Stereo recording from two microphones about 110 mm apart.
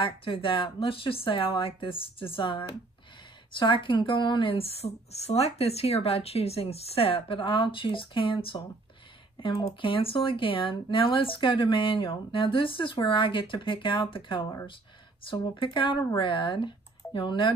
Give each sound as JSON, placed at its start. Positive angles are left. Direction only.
{"t": 0.0, "sound": "a woman's voice", "side_deg": 50}
{"t": 9.8, "sound": "speech", "side_deg": 50}